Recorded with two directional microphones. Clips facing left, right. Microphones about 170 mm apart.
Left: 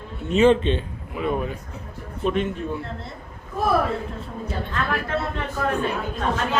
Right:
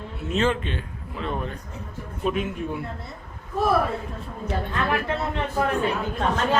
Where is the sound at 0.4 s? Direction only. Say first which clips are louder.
Left 11 dB; 25° left (ahead or behind).